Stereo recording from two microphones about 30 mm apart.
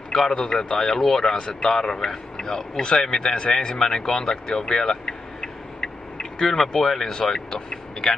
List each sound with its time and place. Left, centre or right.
0.1 s a man's voice: centre
0.4 s a man's voice: left
0.7 s a man's voice: centre; by 3.5 s left
3.5 s speech: centre